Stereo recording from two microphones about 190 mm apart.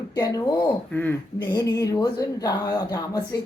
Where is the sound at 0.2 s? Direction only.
20° left (ahead or behind).